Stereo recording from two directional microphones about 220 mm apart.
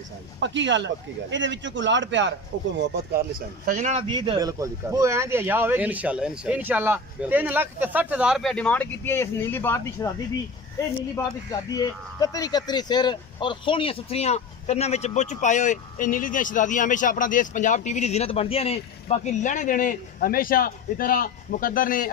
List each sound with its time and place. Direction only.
0.4 s a man's voice: 55° right (ahead or behind)
2.8 s speech: 45° right (ahead or behind)
4.1 s speech: 20° right (ahead or behind); by 10.1 s 10° left (ahead or behind)
11.5 s speech: 15° left (ahead or behind); by 22.1 s 40° left (ahead or behind)